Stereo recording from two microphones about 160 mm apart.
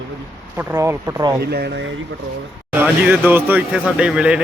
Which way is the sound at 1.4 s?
90° right.